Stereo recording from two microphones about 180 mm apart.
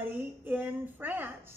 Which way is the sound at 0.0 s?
10° right (ahead or behind).